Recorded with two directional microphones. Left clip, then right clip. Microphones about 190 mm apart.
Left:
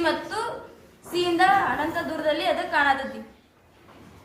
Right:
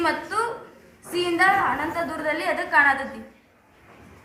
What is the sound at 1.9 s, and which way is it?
A woman's voice, 20° left (ahead or behind).